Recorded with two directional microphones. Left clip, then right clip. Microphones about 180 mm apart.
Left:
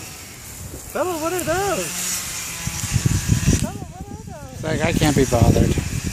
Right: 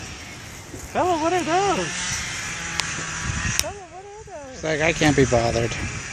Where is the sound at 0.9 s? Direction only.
45° right (ahead or behind).